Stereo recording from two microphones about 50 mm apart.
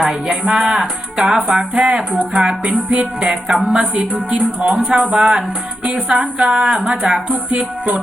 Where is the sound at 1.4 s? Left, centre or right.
Right.